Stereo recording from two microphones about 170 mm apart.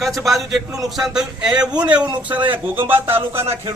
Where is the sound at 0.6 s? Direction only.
20° right (ahead or behind).